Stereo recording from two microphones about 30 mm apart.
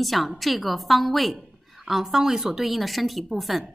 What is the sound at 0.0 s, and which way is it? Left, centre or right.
A woman's voice, centre.